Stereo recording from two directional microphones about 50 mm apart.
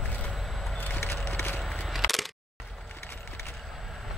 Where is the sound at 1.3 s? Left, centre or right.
Left.